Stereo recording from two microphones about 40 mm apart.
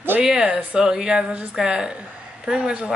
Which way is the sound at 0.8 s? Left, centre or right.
Centre.